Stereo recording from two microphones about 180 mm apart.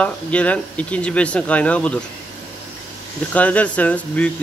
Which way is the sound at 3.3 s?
10° left (ahead or behind).